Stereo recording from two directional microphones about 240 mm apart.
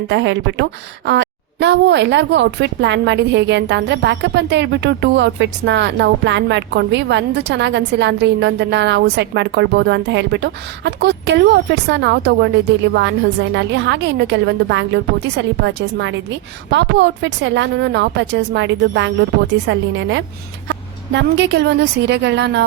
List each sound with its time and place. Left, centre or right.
0.1 s a woman's voice: right